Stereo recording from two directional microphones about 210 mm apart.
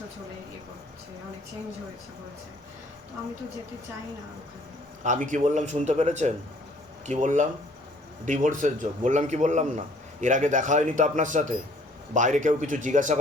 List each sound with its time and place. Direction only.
5.0 s a man's voice: 35° right (ahead or behind)